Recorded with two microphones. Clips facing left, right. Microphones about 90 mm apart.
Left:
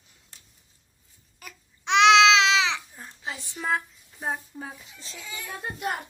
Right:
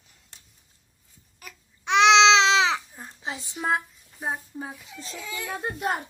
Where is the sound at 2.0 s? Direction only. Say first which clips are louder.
Right 1 dB; 20° right (ahead or behind).